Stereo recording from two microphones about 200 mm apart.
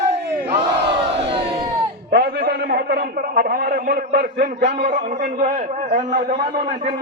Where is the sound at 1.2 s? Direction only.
30° right (ahead or behind).